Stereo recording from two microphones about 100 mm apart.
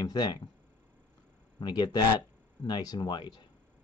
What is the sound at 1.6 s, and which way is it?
Speech, 45° left (ahead or behind).